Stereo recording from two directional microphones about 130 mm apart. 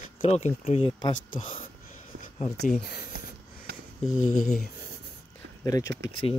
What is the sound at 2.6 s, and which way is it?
Speech, 80° left.